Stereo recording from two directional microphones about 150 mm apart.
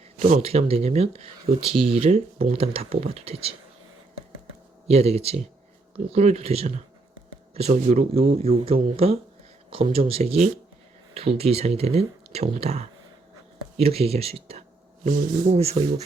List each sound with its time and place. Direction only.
0.3 s speech: 45° right (ahead or behind)
4.9 s speech: 45° right (ahead or behind)
15.0 s speech: 60° right (ahead or behind)
15.5 s speech: 45° right (ahead or behind)